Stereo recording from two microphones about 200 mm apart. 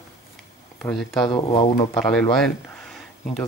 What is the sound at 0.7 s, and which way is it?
Speech, centre (ahead or behind).